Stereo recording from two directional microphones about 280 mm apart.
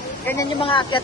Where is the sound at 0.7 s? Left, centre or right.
Centre.